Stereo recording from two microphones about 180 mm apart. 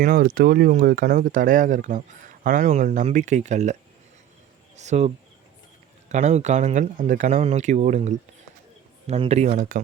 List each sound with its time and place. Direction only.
0.0 s speech: 55° right (ahead or behind)
4.8 s speech: 40° right (ahead or behind)